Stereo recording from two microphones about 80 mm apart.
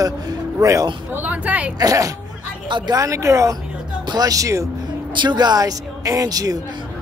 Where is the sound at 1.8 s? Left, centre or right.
Right.